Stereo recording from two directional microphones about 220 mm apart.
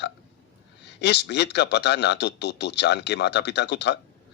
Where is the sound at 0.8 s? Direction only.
50° left (ahead or behind).